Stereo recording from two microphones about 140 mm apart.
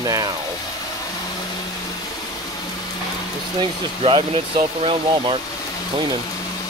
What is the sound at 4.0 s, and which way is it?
Speech, 40° right (ahead or behind).